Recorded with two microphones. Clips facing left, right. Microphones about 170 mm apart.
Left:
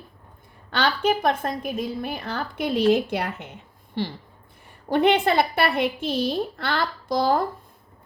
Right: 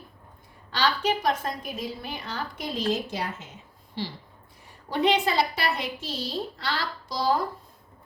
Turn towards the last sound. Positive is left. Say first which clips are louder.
# left 4 dB
turn(degrees=55)  # may be behind; listen again after turning